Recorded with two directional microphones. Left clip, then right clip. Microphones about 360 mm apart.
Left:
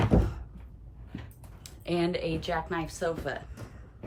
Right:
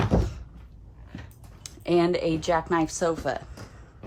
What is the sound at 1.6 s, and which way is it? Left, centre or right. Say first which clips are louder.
Speech: right 7 dB; centre.